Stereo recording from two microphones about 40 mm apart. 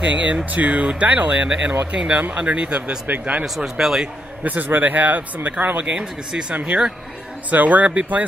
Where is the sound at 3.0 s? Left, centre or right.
Right.